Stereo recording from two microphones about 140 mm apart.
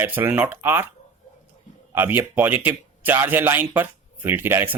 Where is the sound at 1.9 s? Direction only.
15° right (ahead or behind).